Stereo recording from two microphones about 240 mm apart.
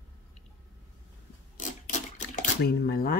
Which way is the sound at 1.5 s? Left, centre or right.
Left.